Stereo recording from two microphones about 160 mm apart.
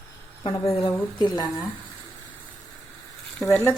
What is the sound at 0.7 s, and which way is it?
Speech, 35° left (ahead or behind).